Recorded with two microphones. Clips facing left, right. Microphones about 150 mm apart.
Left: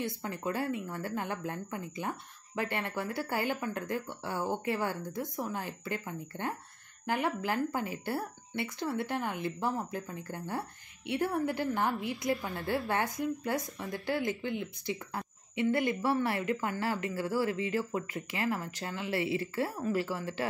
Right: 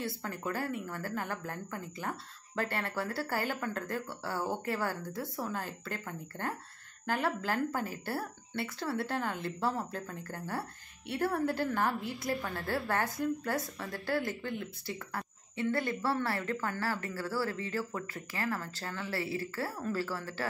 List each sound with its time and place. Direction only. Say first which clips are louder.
0.0 s a woman's voice: left 2 dB; 20° left (ahead or behind)